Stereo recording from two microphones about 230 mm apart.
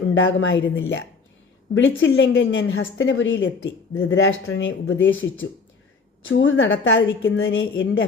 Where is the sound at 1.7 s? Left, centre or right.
Left.